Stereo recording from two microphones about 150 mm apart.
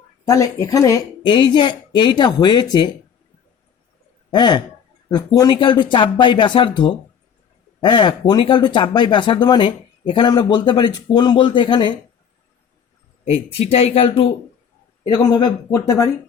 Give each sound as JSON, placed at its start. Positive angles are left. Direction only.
{"t": 0.3, "sound": "a woman's voice", "side_deg": 20}
{"t": 4.3, "sound": "speech", "side_deg": 30}
{"t": 13.2, "sound": "speech", "side_deg": 40}
{"t": 15.0, "sound": "a woman's voice", "side_deg": 30}